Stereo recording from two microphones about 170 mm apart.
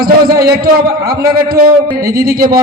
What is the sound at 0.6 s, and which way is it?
A man's voice, 60° right (ahead or behind).